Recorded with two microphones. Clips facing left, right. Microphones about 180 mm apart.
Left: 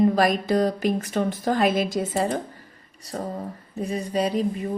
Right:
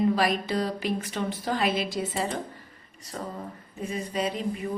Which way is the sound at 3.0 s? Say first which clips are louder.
Left 5 dB; 40° left (ahead or behind).